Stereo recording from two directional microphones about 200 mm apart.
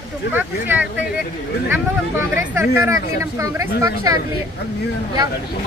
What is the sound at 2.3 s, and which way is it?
Speech, 15° right (ahead or behind).